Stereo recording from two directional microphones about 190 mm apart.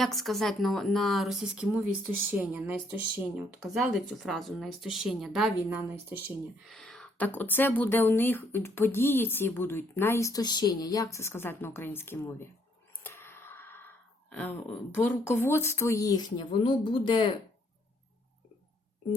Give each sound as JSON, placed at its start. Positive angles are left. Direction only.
{"t": 0.0, "sound": "a woman's voice", "side_deg": 0}
{"t": 6.7, "sound": "speech", "side_deg": 5}
{"t": 13.0, "sound": "a sound", "side_deg": 10}
{"t": 14.9, "sound": "speech", "side_deg": 10}